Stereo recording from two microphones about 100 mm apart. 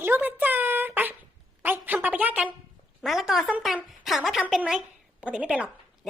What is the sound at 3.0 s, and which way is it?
A woman's voice, centre (ahead or behind).